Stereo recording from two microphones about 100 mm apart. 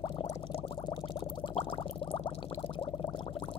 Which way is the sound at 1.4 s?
55° left (ahead or behind).